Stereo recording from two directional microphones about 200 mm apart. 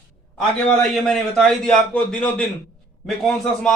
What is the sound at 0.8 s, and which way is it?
A man's voice, 5° left (ahead or behind).